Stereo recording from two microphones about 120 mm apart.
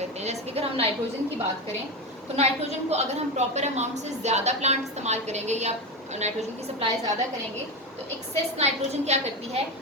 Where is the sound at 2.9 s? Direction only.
65° right (ahead or behind).